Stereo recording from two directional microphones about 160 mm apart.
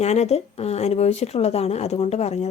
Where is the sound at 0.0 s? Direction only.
45° left (ahead or behind).